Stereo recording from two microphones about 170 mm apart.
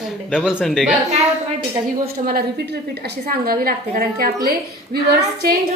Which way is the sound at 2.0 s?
65° right (ahead or behind).